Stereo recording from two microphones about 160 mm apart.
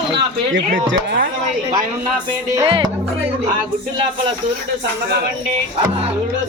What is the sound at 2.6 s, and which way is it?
Music, 35° right (ahead or behind).